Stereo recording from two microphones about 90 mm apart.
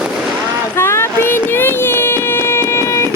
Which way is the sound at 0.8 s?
30° left (ahead or behind).